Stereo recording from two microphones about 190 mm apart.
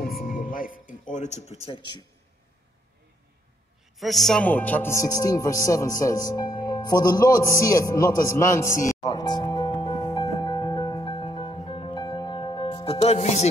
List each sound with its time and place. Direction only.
0.2 s music: 45° left (ahead or behind)
1.1 s speech: 40° left (ahead or behind)
1.7 s speech: 25° left (ahead or behind)
4.0 s speech: centre (ahead or behind)
8.8 s music: 20° left (ahead or behind)